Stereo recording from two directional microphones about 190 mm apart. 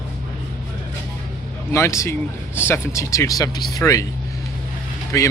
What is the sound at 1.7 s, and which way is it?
Speech, 15° left (ahead or behind).